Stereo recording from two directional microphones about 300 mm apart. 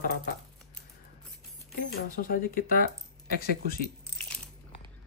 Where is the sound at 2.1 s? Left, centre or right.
Left.